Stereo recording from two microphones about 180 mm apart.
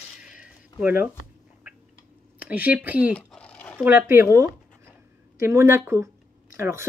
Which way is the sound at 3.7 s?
10° right (ahead or behind).